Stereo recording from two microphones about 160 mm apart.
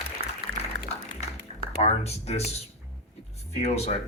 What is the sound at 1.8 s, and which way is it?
Speech, 40° left (ahead or behind).